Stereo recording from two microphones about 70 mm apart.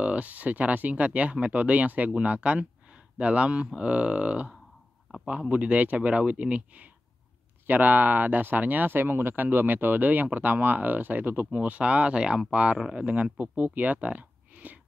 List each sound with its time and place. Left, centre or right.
0.0 s a man's voice: centre